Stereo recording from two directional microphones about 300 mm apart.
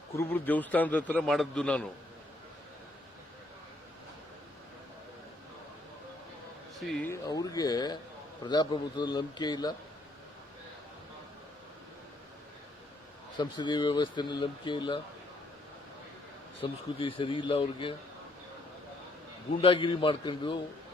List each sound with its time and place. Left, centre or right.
0.2 s a man's voice: centre
6.7 s speech: centre
13.3 s speech: centre
16.6 s speech: centre
19.6 s speech: centre